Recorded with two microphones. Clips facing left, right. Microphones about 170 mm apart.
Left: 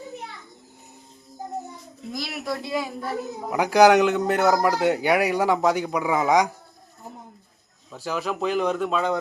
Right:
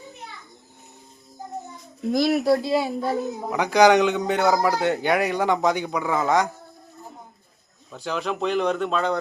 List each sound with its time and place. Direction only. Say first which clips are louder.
2.1 s speech: right 13 dB; 50° right (ahead or behind)
2.4 s speech: right 7 dB; 35° right (ahead or behind)
3.5 s a man's voice: left 1 dB; 10° left (ahead or behind)
7.9 s speech: even; 5° left (ahead or behind)